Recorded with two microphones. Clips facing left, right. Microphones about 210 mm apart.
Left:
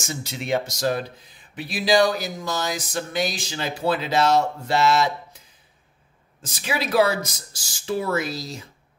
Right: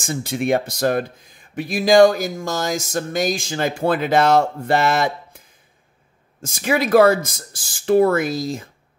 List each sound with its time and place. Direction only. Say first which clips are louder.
0.0 s speech: right 9 dB; 55° right (ahead or behind)
6.4 s speech: right 7 dB; 50° right (ahead or behind)